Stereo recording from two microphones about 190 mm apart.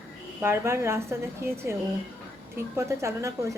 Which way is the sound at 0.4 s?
15° right (ahead or behind).